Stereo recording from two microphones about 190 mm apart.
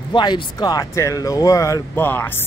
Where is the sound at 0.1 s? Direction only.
25° left (ahead or behind).